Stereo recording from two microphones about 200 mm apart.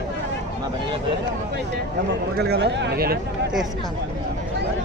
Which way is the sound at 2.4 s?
55° right (ahead or behind).